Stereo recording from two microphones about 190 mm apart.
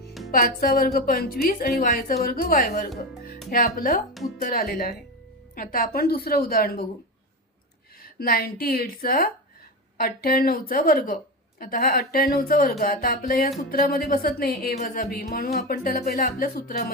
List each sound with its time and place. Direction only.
0.3 s speech: 50° left (ahead or behind)
8.2 s speech: 50° left (ahead or behind)